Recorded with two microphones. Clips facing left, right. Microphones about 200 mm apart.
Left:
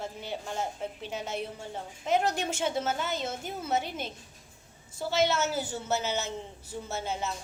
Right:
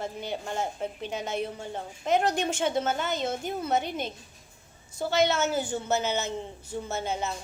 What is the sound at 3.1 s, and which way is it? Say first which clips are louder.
A woman's voice: right 4 dB; 55° right (ahead or behind).